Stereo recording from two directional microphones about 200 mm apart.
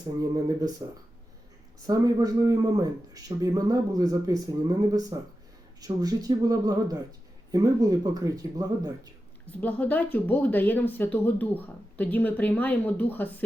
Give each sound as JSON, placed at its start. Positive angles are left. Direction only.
{"t": 0.2, "sound": "a man's voice", "side_deg": -15}
{"t": 1.9, "sound": "a man's voice", "side_deg": -20}
{"t": 9.5, "sound": "speech", "side_deg": 10}